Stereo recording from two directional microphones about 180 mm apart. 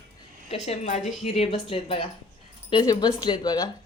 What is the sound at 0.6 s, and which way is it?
Speech, 40° left (ahead or behind).